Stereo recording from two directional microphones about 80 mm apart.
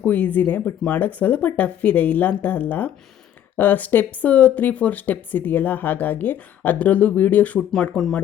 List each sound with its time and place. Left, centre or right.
0.0 s speech: left
7.7 s speech: centre